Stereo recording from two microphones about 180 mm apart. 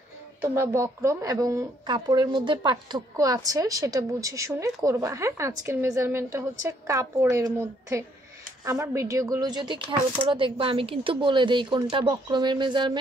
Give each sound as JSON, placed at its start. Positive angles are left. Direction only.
{"t": 0.4, "sound": "a woman's voice", "side_deg": -15}